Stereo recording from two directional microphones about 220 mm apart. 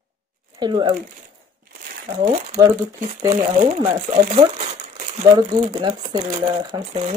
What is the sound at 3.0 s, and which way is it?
Speech, 30° right (ahead or behind).